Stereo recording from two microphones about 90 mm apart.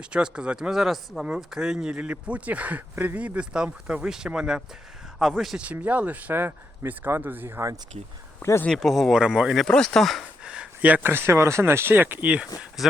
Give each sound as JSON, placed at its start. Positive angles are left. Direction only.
{"t": 0.0, "sound": "speech", "side_deg": -10}
{"t": 5.6, "sound": "speech", "side_deg": -20}
{"t": 8.4, "sound": "speech", "side_deg": 25}
{"t": 8.8, "sound": "speech", "side_deg": 0}
{"t": 9.2, "sound": "speech", "side_deg": -10}
{"t": 9.6, "sound": "speech", "side_deg": 5}
{"t": 10.4, "sound": "speech", "side_deg": -10}
{"t": 12.8, "sound": "speech", "side_deg": -5}